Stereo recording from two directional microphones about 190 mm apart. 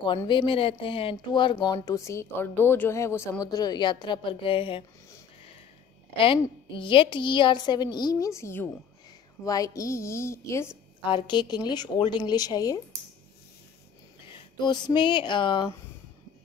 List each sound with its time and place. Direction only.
0.3 s speech: 25° left (ahead or behind)
6.1 s a woman's voice: 25° left (ahead or behind)
11.1 s speech: 25° left (ahead or behind)
14.6 s speech: 25° left (ahead or behind)